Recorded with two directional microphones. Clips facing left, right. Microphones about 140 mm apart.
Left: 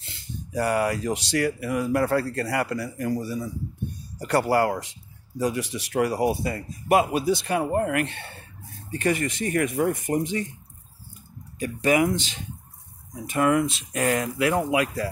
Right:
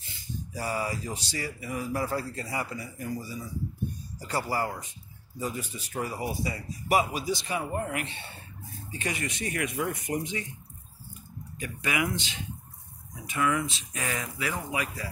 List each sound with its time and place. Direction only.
0.0 s speech: 70° left (ahead or behind); by 10.4 s 45° left (ahead or behind)
11.6 s speech: 40° left (ahead or behind); by 15.0 s 65° left (ahead or behind)